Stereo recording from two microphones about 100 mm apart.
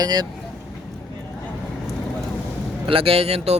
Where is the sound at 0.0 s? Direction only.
40° right (ahead or behind).